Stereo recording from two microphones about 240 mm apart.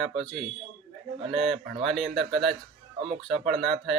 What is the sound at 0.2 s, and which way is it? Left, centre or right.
Speech, centre.